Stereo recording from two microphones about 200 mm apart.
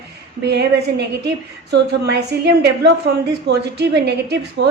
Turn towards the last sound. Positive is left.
turn(degrees=-55)  # may be behind; listen again after turning